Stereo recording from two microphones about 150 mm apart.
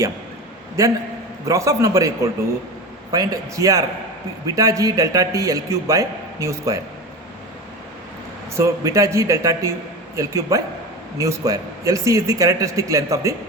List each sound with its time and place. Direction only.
1.5 s a man's voice: 20° right (ahead or behind)
8.5 s a man's voice: 20° right (ahead or behind)